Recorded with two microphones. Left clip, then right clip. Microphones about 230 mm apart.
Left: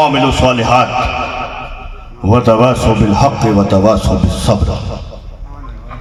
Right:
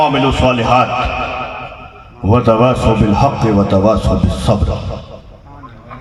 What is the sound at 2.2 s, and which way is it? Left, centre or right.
A man's voice, left.